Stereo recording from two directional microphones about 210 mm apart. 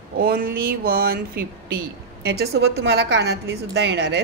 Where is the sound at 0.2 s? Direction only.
45° right (ahead or behind).